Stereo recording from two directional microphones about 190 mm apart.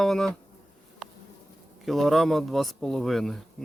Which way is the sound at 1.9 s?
Centre (ahead or behind).